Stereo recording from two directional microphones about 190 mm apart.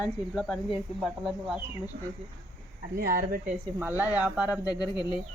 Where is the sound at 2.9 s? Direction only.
50° right (ahead or behind).